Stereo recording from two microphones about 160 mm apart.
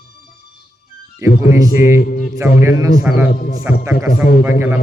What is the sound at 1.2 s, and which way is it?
Speech, 20° right (ahead or behind).